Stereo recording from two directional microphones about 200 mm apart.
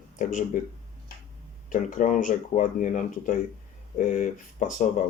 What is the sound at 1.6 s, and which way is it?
Speech, 40° left (ahead or behind).